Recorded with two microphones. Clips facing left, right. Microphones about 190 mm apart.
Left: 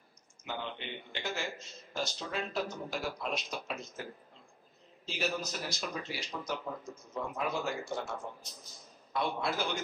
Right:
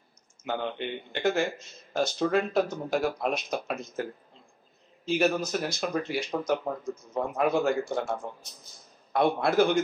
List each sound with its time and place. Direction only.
0.5 s speech: 55° right (ahead or behind)
9.1 s speech: 55° right (ahead or behind)